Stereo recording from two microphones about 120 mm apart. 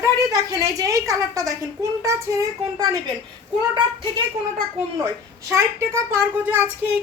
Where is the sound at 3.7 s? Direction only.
40° right (ahead or behind).